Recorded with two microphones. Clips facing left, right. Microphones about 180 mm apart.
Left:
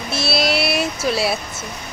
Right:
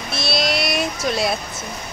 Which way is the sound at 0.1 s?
5° left (ahead or behind).